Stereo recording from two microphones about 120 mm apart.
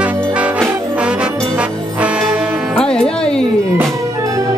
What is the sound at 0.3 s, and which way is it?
Music, 10° right (ahead or behind).